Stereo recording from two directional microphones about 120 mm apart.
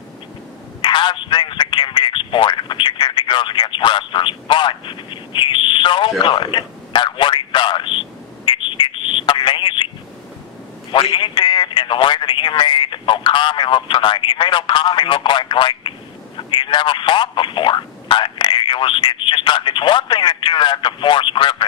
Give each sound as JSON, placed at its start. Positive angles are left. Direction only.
{"t": 0.8, "sound": "speech", "side_deg": 40}
{"t": 8.5, "sound": "a sound", "side_deg": 45}
{"t": 10.9, "sound": "a man's voice", "side_deg": 45}